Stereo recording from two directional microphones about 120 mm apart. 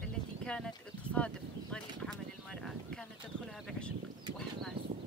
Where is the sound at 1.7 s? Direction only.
5° left (ahead or behind).